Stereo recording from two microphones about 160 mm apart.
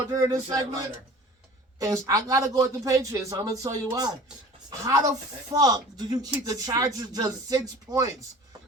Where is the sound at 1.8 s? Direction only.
20° right (ahead or behind).